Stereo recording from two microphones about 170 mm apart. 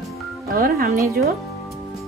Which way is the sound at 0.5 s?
60° right (ahead or behind).